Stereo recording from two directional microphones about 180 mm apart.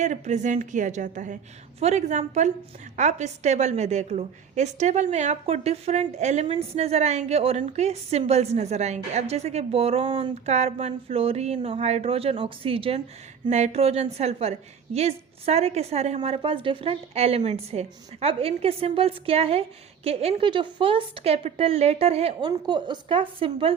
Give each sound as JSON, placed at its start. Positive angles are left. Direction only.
{"t": 0.0, "sound": "a woman's voice", "side_deg": -40}